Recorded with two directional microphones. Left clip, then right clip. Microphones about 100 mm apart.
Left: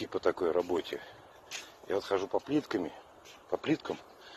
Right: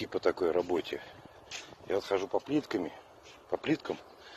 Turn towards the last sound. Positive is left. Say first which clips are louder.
# even
turn(degrees=-5)  # may be behind; listen again after turning